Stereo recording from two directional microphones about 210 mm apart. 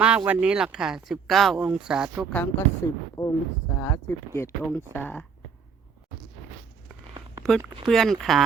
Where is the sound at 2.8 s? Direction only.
15° left (ahead or behind).